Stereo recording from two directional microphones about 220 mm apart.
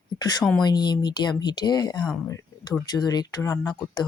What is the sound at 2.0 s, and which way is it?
Speech, 5° left (ahead or behind).